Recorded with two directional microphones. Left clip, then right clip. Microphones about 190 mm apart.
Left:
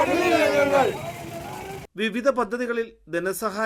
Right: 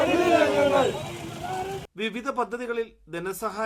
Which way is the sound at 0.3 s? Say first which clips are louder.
Left 1 dB; 10° left (ahead or behind).